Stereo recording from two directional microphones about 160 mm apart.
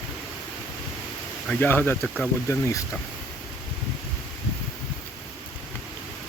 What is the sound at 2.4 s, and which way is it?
Speech, 15° left (ahead or behind).